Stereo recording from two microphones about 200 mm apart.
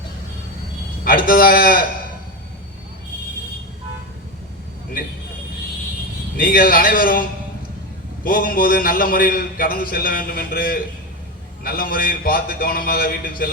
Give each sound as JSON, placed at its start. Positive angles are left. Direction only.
{"t": 1.0, "sound": "a man's voice", "side_deg": 45}
{"t": 6.3, "sound": "a man's voice", "side_deg": 45}